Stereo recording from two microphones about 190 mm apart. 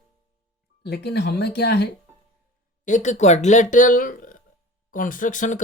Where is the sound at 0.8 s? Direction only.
60° left (ahead or behind).